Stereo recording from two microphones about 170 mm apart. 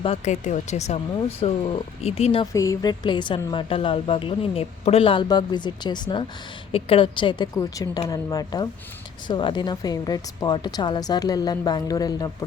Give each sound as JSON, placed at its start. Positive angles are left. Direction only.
{"t": 0.0, "sound": "speech", "side_deg": 40}
{"t": 2.5, "sound": "a woman's voice", "side_deg": 20}